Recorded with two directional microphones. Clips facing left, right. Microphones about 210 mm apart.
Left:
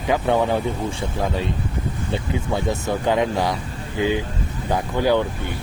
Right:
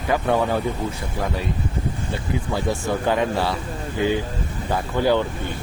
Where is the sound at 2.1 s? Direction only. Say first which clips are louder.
Left 3 dB; 20° left (ahead or behind).